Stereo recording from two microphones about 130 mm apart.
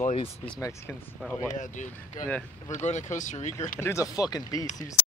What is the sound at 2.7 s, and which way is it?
Speech, 65° left (ahead or behind).